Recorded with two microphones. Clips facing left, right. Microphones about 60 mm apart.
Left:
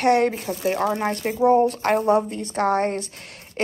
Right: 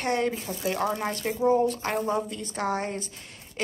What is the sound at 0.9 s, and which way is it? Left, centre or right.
Speech, left.